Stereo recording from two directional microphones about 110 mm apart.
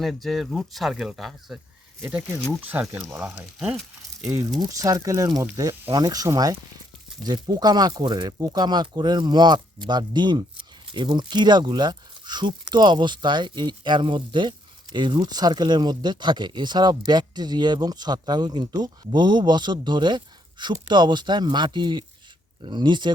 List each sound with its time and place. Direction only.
0.0 s speech: centre (ahead or behind)
2.6 s speech: 15° right (ahead or behind)
4.6 s speech: 30° right (ahead or behind)